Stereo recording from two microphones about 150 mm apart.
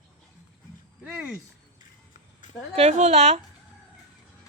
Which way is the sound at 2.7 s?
45° right (ahead or behind).